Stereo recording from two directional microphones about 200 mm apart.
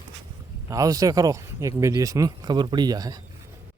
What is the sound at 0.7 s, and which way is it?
Speech, 15° right (ahead or behind).